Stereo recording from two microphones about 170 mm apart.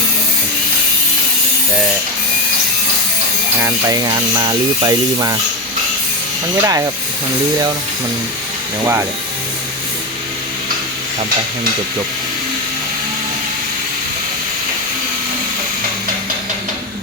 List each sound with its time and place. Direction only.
3.6 s speech: 20° right (ahead or behind)
6.6 s speech: 20° right (ahead or behind)